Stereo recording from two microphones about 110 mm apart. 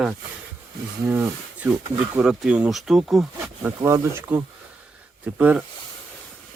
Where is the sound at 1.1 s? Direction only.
15° right (ahead or behind).